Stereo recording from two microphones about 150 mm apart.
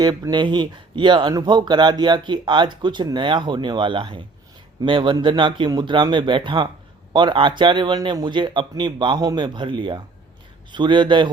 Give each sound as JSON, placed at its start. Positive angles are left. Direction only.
{"t": 0.0, "sound": "speech", "side_deg": -25}